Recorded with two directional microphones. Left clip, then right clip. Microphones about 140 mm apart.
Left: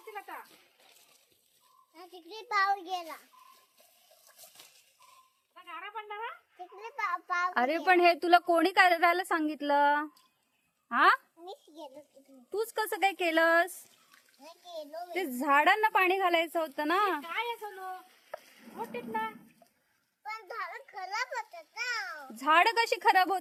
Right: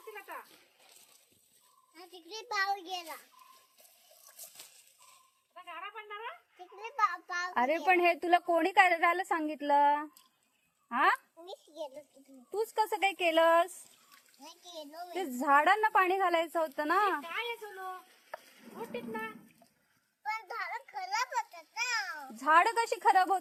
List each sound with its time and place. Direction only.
2.0 s a woman's voice: 10° left (ahead or behind)
5.5 s a sound: 35° left (ahead or behind)
6.6 s a child's voice: 20° left (ahead or behind)
14.9 s a woman's voice: 10° left (ahead or behind)
17.0 s a child's voice: 30° left (ahead or behind)
18.3 s a sound: centre (ahead or behind)
18.9 s speech: 35° left (ahead or behind)
20.2 s a sound: 10° left (ahead or behind)
22.4 s a child's voice: 20° left (ahead or behind)